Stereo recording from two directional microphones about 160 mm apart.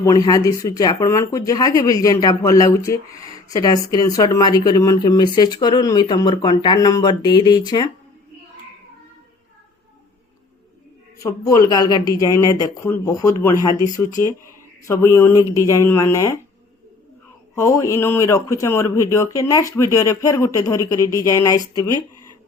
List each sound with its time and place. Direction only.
0.0 s speech: 25° left (ahead or behind)
11.2 s speech: 20° left (ahead or behind)
17.5 s speech: 15° left (ahead or behind)